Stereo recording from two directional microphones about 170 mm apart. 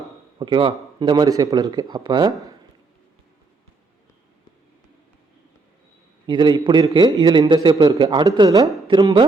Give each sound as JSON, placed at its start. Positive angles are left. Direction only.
{"t": 0.3, "sound": "a man's voice", "side_deg": -30}
{"t": 6.2, "sound": "a man's voice", "side_deg": -25}